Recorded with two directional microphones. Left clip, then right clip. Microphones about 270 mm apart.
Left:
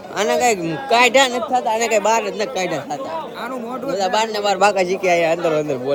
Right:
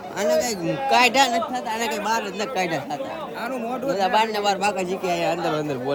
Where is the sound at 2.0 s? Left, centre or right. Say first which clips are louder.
Left 6 dB; centre.